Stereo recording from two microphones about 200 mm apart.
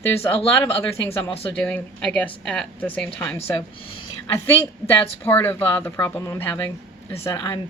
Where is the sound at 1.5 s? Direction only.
5° left (ahead or behind).